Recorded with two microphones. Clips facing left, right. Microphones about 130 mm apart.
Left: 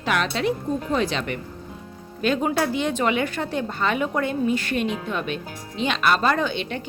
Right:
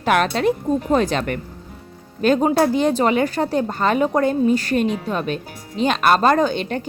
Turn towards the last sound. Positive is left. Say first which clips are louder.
# right 6 dB
turn(degrees=-40)  # may be behind; listen again after turning